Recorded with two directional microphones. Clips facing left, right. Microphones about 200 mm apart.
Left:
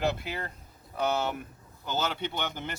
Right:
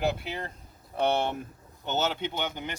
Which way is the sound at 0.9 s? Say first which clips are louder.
Right 3 dB; 30° right (ahead or behind).